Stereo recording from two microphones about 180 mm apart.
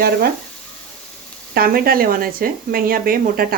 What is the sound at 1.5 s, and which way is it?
Speech, 55° right (ahead or behind).